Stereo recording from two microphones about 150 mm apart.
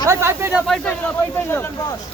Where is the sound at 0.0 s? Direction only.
20° right (ahead or behind).